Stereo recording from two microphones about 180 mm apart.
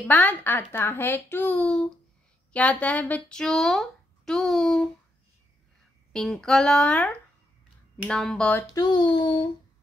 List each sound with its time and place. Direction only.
0.1 s speech: 10° left (ahead or behind)
6.1 s speech: 5° left (ahead or behind)
8.7 s speech: 25° left (ahead or behind)